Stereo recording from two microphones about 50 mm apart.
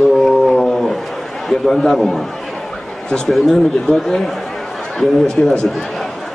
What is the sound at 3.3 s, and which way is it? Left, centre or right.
Speech, centre.